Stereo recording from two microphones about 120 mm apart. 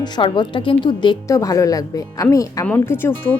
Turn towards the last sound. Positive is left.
turn(degrees=20)  # may be behind; listen again after turning